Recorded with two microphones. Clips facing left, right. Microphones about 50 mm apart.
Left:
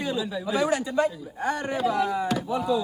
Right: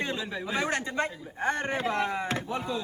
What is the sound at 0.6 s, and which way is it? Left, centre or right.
Speech, right.